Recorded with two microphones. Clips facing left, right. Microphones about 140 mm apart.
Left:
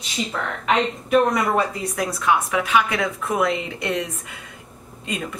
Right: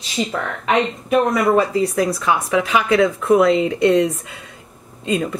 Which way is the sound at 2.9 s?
30° right (ahead or behind).